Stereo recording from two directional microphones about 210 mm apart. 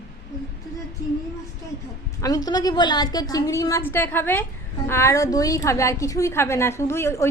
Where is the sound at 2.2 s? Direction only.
15° left (ahead or behind).